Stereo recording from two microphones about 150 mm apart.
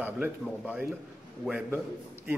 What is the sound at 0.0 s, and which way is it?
A man's voice, 10° right (ahead or behind).